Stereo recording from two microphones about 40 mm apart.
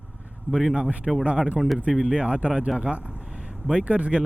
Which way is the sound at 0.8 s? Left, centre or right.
Right.